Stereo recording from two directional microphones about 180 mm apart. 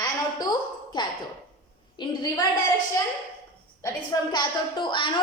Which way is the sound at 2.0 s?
25° left (ahead or behind).